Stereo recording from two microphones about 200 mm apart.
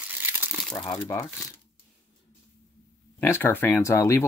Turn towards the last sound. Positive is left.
turn(degrees=15)  # may be behind; listen again after turning